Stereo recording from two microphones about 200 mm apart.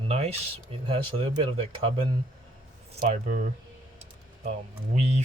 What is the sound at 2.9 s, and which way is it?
Speech, 35° right (ahead or behind).